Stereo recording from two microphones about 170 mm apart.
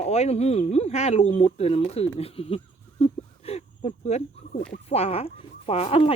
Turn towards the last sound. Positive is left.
turn(degrees=35)  # may be behind; listen again after turning